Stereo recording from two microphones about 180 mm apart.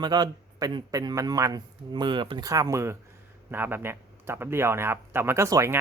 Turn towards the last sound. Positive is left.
turn(degrees=-15)  # may be behind; listen again after turning